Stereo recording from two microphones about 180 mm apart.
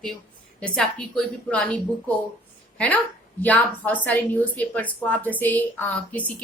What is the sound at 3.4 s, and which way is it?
Speech, 10° left (ahead or behind).